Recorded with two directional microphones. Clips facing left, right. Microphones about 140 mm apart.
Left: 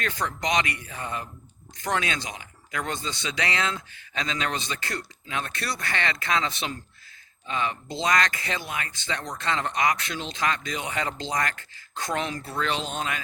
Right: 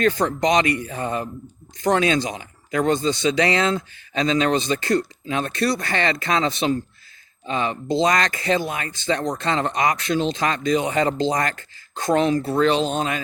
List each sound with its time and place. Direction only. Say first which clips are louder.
0.0 s speech: right 10 dB; 35° right (ahead or behind)